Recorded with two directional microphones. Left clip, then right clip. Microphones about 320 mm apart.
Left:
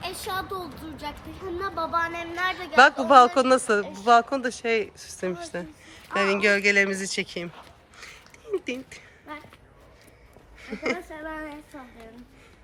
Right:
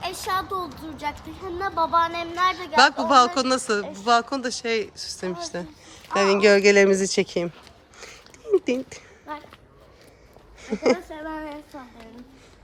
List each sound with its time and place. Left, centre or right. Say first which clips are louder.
0.0 s speech: right 5 dB; centre
2.0 s speech: right 4 dB; right
3.1 s speech: left 2 dB; centre
7.9 s a sound: right 1 dB; centre
10.6 s speech: right 7 dB; centre